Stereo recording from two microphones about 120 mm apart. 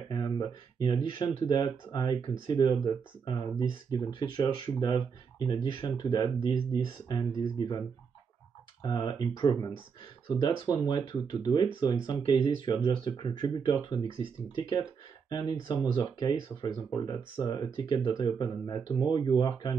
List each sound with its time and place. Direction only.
0.1 s speech: 35° left (ahead or behind)
8.8 s speech: 35° left (ahead or behind)